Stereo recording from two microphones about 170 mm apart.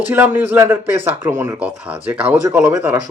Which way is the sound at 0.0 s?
10° right (ahead or behind).